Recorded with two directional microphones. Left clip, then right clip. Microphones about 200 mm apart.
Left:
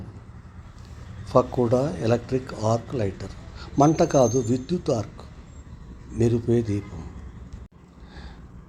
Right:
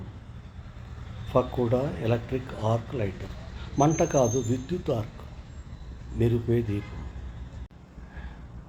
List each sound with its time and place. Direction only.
1.3 s speech: 30° left (ahead or behind)
6.1 s speech: 30° left (ahead or behind)